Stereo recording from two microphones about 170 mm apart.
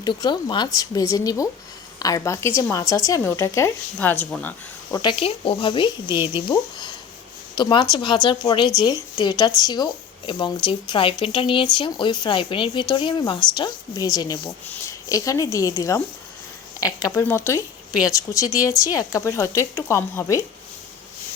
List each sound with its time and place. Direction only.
0.0 s speech: 25° left (ahead or behind); by 4.5 s 10° left (ahead or behind)
4.9 s speech: 25° left (ahead or behind)